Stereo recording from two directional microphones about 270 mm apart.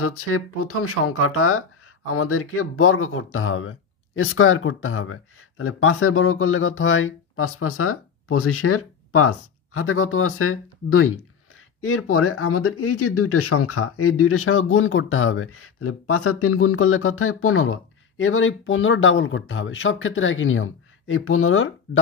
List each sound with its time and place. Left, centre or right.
0.0 s speech: left